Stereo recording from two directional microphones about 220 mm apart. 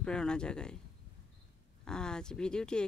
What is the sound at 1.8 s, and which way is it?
Speech, 5° left (ahead or behind).